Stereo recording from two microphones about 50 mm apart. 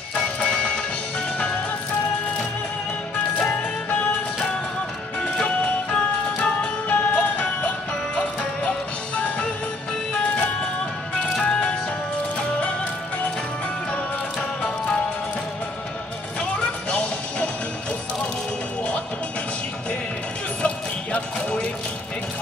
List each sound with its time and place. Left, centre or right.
0.1 s music: left
5.9 s music: left
16.9 s music: left
20.6 s music: left